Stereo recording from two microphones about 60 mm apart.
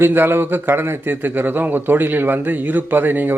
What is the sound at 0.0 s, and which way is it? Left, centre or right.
Speech, right.